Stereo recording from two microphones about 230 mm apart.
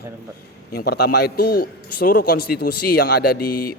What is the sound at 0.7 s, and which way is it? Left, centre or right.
A man's voice, left.